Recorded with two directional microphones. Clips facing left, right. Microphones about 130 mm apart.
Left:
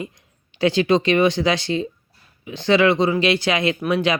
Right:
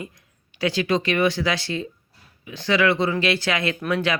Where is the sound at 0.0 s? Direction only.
20° left (ahead or behind).